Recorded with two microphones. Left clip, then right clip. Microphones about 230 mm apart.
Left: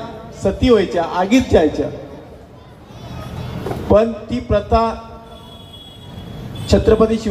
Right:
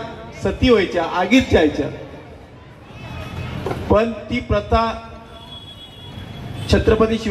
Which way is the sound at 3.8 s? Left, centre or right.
Left.